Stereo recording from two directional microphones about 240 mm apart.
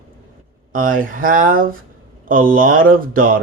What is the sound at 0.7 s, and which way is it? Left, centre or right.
Speech, right.